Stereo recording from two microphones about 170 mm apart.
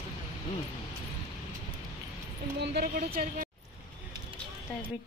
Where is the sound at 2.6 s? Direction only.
65° right (ahead or behind).